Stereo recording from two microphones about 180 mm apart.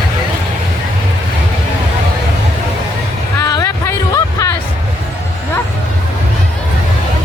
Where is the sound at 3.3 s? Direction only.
15° left (ahead or behind).